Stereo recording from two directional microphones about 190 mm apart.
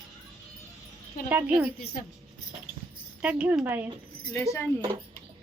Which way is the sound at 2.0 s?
50° left (ahead or behind).